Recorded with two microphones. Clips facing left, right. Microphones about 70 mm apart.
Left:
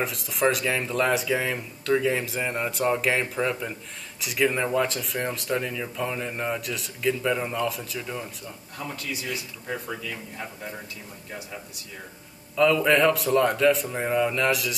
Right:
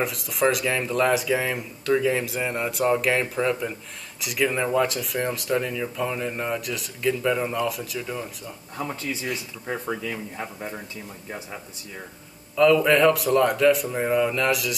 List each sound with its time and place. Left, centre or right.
0.0 s speech: centre
8.7 s speech: right
12.5 s speech: centre